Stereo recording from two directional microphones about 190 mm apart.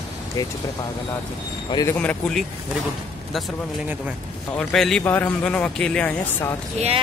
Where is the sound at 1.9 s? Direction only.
5° left (ahead or behind).